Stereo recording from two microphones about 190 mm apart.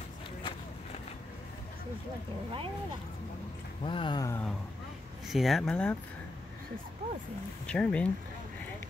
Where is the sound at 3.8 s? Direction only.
25° left (ahead or behind).